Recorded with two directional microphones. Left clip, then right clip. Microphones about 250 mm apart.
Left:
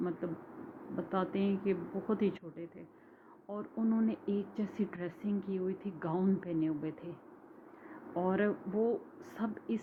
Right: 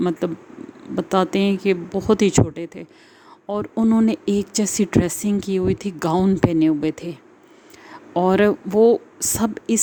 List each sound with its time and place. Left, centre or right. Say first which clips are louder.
0.9 s speech: right 16 dB; right